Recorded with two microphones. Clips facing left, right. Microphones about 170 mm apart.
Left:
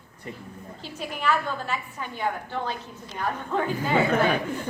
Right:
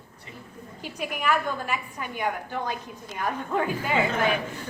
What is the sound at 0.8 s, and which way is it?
A woman's voice, 10° right (ahead or behind).